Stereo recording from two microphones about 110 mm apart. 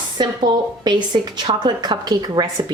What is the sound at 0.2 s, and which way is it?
A woman's voice, 40° right (ahead or behind).